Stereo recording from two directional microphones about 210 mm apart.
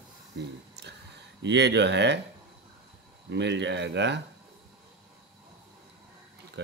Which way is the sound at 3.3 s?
55° right (ahead or behind).